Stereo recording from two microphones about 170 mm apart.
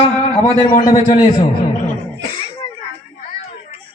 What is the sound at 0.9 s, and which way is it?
Speech, 50° left (ahead or behind).